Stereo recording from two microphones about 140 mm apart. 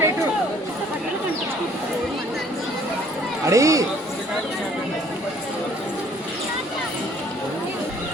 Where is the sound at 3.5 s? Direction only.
25° right (ahead or behind).